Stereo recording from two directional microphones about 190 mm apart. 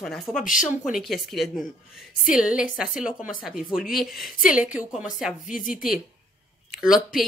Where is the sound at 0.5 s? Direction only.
40° left (ahead or behind).